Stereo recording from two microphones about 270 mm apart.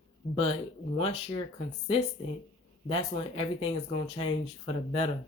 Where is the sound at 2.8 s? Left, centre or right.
Centre.